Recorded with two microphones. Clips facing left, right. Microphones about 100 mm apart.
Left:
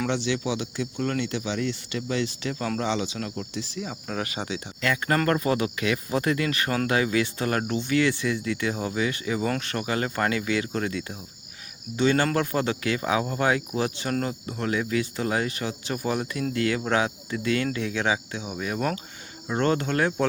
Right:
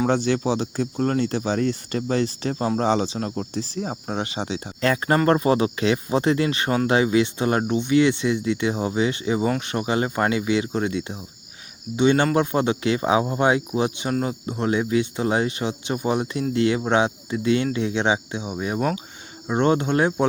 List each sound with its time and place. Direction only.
0.1 s speech: 45° right (ahead or behind); by 18.8 s 25° right (ahead or behind)
18.8 s speech: 10° right (ahead or behind)